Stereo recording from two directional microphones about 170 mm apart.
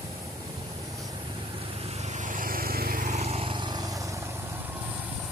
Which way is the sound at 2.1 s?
50° right (ahead or behind).